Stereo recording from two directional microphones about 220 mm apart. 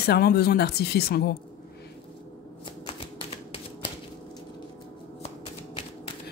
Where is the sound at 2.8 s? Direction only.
25° left (ahead or behind).